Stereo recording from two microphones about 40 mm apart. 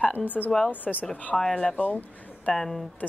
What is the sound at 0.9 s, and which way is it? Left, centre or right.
Speech, centre.